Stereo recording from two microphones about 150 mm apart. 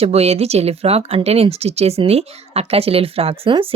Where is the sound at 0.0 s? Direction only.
45° right (ahead or behind).